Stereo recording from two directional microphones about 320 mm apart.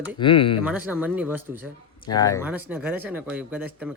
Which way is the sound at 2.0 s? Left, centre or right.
Centre.